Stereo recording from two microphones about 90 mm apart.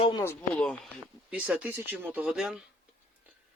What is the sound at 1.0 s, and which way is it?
Speech, 15° right (ahead or behind).